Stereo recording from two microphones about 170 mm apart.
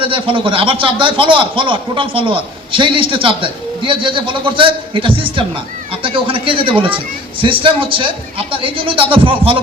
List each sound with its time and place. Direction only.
0.0 s a man's voice: 30° right (ahead or behind)